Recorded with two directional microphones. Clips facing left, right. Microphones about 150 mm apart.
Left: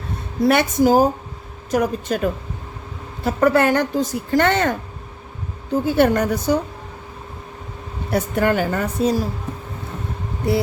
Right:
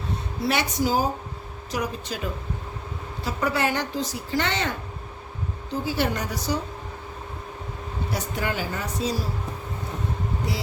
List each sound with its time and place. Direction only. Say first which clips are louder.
0.4 s a woman's voice: left 9 dB; 50° left (ahead or behind)
5.8 s a woman's voice: left 10 dB; 55° left (ahead or behind)
8.1 s speech: left 11 dB; 55° left (ahead or behind)